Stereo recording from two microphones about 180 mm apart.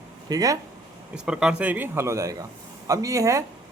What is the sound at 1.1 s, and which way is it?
A man's voice, 5° right (ahead or behind).